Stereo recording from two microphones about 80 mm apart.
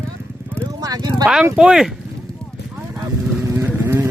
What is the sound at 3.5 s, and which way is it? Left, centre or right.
Vehicle, right.